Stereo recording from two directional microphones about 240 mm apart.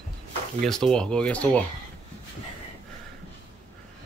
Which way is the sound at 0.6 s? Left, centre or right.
Centre.